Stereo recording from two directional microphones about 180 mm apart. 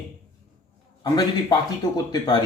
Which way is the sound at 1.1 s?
20° left (ahead or behind).